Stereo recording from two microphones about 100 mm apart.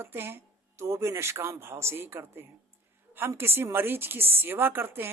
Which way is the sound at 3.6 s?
20° right (ahead or behind).